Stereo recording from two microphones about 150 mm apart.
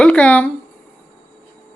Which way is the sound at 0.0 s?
5° left (ahead or behind).